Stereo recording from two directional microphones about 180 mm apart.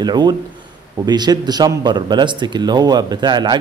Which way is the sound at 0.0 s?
25° right (ahead or behind).